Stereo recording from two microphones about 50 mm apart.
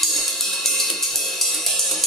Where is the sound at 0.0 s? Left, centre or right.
Centre.